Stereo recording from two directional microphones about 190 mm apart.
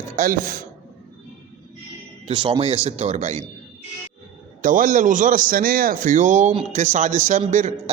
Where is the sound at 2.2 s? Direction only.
25° right (ahead or behind).